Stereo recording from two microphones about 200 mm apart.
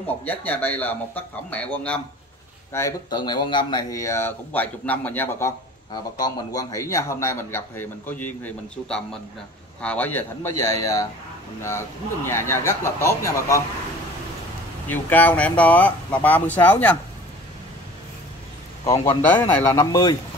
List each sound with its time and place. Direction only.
0.0 s a man's voice: 10° left (ahead or behind)
2.7 s a man's voice: 20° left (ahead or behind)
12.3 s a man's voice: 15° left (ahead or behind)
14.9 s a man's voice: 10° left (ahead or behind)
19.3 s a man's voice: 15° left (ahead or behind)